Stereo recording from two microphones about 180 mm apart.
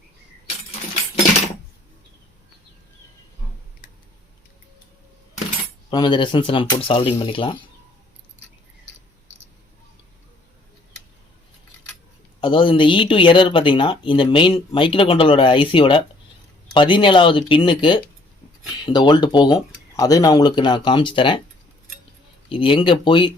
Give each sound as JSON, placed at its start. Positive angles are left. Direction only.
{"t": 5.9, "sound": "speech", "side_deg": 25}
{"t": 12.4, "sound": "speech", "side_deg": 30}
{"t": 22.4, "sound": "speech", "side_deg": 30}